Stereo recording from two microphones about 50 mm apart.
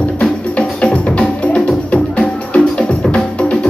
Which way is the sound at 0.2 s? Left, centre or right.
Left.